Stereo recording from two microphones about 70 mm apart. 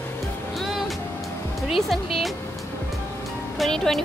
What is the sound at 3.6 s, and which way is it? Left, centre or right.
Speech, centre.